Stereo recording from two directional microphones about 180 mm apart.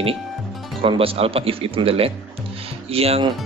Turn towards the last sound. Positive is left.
turn(degrees=-35)  # may be behind; listen again after turning